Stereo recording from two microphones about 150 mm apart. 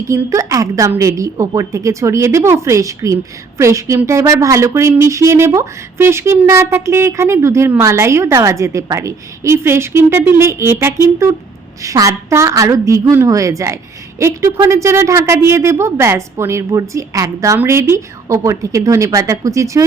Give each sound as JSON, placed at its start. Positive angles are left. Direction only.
{"t": 0.1, "sound": "a woman's voice", "side_deg": -20}